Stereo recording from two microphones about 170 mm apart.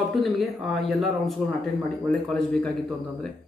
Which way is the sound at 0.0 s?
Centre (ahead or behind).